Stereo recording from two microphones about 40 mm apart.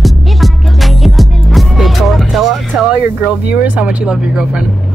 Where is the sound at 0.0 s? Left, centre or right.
Centre.